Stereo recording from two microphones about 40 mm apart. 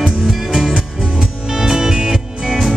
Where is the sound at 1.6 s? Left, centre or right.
Centre.